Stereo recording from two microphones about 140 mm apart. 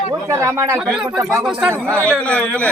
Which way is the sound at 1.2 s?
20° right (ahead or behind).